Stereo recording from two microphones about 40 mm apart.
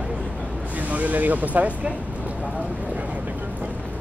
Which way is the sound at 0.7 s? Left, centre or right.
Right.